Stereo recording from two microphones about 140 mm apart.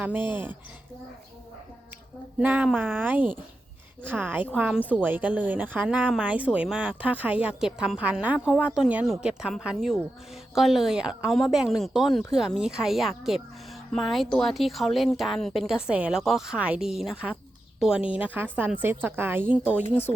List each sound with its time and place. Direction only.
0.2 s speech: 35° left (ahead or behind)
2.4 s speech: 10° right (ahead or behind)